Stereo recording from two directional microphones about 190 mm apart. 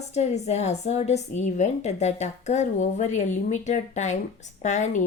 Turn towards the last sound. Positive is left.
turn(degrees=40)  # may be behind; listen again after turning